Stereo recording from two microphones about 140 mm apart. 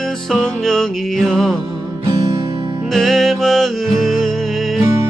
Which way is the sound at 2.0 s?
30° right (ahead or behind).